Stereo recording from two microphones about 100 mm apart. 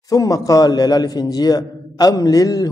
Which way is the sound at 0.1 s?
35° left (ahead or behind).